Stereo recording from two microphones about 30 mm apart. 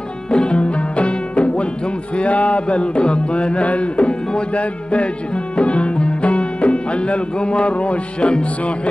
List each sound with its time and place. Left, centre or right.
0.3 s music: left
3.6 s speech: left